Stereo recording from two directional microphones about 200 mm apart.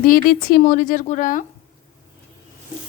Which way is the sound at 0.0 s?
45° left (ahead or behind).